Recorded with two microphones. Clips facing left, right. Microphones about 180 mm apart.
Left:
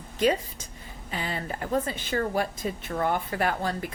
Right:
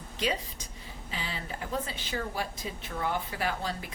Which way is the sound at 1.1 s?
50° left (ahead or behind).